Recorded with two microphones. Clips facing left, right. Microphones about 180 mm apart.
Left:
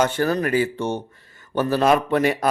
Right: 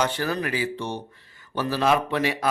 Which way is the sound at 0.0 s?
50° left (ahead or behind).